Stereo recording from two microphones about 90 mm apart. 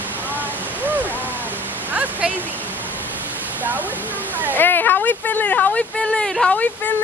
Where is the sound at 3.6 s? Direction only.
20° right (ahead or behind).